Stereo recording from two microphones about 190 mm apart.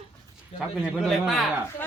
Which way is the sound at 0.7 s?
Centre (ahead or behind).